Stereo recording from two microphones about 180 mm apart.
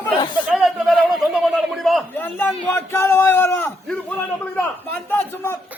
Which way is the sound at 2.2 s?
10° left (ahead or behind).